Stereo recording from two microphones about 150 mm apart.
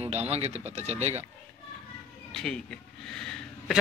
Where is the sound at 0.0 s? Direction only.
45° right (ahead or behind).